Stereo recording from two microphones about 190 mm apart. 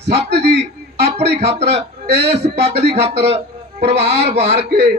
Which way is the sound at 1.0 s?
35° right (ahead or behind).